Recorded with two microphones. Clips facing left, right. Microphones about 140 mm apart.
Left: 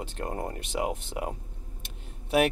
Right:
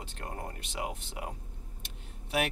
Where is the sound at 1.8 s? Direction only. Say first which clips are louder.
Left 3 dB; 50° left (ahead or behind).